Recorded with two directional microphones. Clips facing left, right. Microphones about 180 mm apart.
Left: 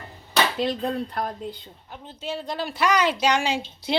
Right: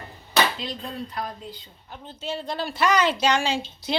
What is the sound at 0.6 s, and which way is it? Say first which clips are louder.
Speech: left 8 dB; 55° left (ahead or behind).